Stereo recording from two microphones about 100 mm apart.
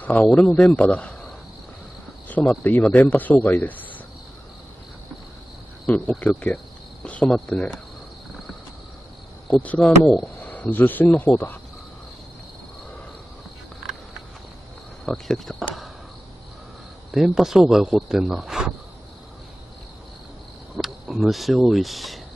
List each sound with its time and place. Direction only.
0.2 s a man's voice: 10° left (ahead or behind)
2.2 s cricket: 15° left (ahead or behind)
2.6 s a man's voice: 20° left (ahead or behind)
5.9 s a man's voice: 15° left (ahead or behind)
9.6 s a man's voice: 15° left (ahead or behind)
15.0 s speech: 5° left (ahead or behind)
17.1 s speech: 5° right (ahead or behind)
20.7 s speech: centre (ahead or behind)